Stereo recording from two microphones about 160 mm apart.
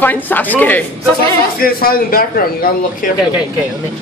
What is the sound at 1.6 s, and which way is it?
Speech, 65° left (ahead or behind).